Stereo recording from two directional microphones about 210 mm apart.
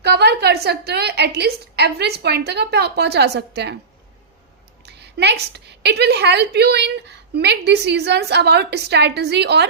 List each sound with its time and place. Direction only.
0.0 s a woman's voice: 50° right (ahead or behind)
4.9 s a woman's voice: 50° right (ahead or behind)